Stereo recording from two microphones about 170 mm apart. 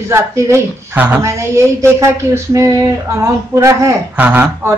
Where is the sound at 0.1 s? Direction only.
15° right (ahead or behind).